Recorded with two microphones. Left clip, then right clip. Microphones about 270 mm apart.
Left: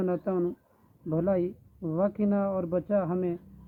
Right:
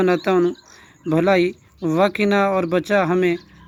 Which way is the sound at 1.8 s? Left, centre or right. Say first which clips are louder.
Right 11 dB; right.